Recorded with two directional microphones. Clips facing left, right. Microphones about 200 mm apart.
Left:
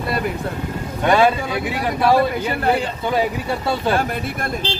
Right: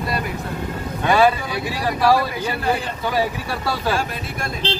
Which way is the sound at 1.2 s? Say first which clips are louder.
Even; 20° left (ahead or behind).